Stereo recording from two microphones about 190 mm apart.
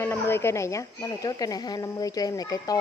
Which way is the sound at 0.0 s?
10° left (ahead or behind).